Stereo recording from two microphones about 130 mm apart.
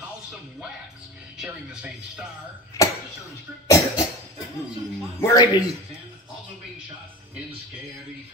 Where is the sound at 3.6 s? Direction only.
25° left (ahead or behind).